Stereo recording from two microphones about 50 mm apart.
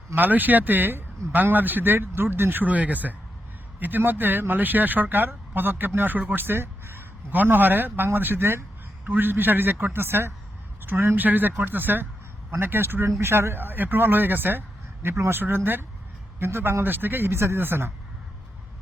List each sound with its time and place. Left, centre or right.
0.2 s speech: right
6.5 s speech: right
13.1 s speech: right
15.0 s speech: right